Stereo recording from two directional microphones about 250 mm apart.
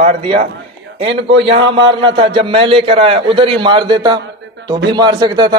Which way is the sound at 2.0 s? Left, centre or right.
Right.